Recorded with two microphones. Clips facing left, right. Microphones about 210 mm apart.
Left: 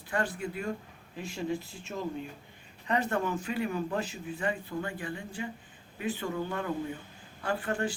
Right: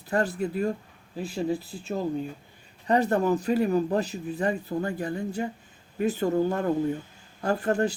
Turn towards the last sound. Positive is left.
turn(degrees=-40)  # may be behind; listen again after turning